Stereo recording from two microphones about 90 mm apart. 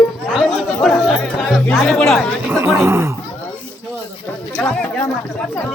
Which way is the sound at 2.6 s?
30° right (ahead or behind).